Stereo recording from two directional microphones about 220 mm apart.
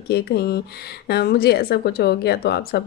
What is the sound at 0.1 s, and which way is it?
Speech, 45° left (ahead or behind).